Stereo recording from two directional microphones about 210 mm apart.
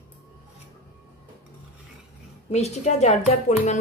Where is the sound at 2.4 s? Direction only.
30° left (ahead or behind).